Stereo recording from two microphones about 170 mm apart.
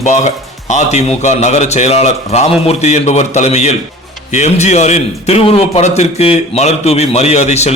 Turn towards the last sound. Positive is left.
turn(degrees=40)  # may be behind; listen again after turning